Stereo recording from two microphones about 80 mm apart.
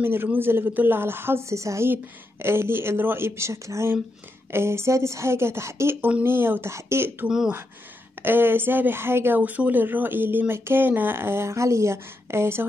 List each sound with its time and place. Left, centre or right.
0.0 s a woman's voice: right
7.2 s speech: centre
8.2 s a woman's voice: right